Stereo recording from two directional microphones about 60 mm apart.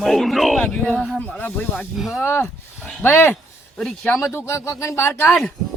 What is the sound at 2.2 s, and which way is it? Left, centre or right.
Speech, left.